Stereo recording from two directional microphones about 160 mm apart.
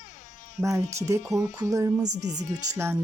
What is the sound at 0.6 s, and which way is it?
Speech, 20° right (ahead or behind).